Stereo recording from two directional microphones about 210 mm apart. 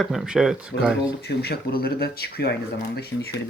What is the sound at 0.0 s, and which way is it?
Speech, centre (ahead or behind).